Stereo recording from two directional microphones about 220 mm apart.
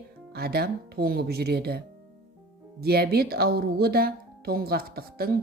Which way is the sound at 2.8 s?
45° right (ahead or behind).